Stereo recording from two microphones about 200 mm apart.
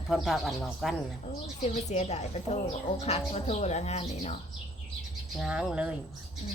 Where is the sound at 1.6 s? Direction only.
35° left (ahead or behind).